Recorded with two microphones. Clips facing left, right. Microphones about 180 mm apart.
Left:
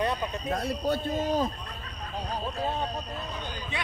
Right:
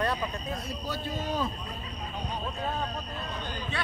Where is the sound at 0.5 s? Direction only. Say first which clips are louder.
Left 7 dB; 70° left (ahead or behind); by 1.5 s 45° left (ahead or behind).